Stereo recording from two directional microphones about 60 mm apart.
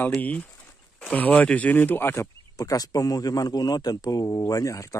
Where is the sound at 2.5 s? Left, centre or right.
Left.